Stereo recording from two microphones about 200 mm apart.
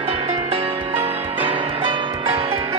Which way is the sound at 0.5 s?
30° right (ahead or behind).